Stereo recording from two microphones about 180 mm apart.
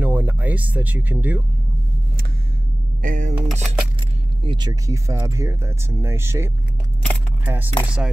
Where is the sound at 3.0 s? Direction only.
50° right (ahead or behind).